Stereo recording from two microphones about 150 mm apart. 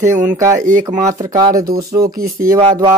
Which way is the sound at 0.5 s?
60° right (ahead or behind).